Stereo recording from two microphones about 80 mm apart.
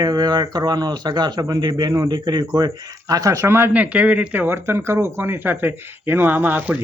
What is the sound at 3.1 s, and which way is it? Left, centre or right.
Speech, right.